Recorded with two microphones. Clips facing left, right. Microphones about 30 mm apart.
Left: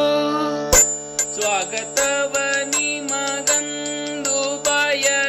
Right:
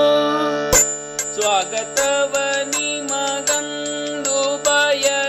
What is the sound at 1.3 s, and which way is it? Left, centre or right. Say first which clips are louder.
Music: right 4 dB; centre.